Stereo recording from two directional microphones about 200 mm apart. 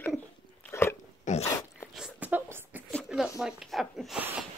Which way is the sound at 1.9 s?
5° right (ahead or behind).